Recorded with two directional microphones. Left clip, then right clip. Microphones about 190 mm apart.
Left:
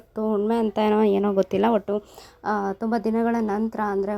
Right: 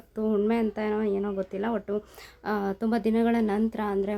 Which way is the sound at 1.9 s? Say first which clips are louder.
Left 4 dB; 10° left (ahead or behind).